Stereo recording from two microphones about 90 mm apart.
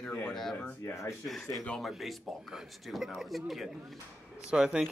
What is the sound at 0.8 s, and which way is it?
Speech, 30° left (ahead or behind).